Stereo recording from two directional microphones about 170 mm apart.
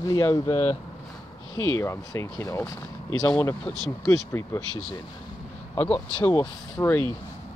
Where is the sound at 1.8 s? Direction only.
15° left (ahead or behind).